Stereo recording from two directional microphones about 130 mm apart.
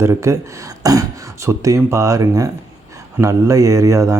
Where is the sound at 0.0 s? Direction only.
20° right (ahead or behind).